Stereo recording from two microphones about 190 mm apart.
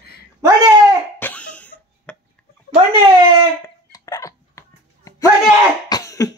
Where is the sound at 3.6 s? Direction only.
20° left (ahead or behind).